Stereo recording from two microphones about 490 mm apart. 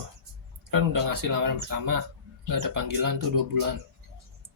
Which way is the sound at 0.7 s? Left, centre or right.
Right.